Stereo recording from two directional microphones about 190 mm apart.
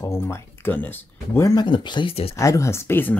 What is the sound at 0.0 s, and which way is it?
Speech, 15° left (ahead or behind).